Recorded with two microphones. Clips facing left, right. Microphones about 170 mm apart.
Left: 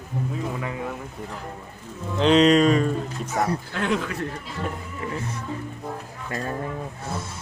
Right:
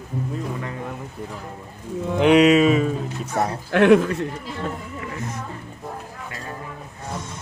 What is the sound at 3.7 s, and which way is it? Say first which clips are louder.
Speech: right 11 dB; 65° right (ahead or behind).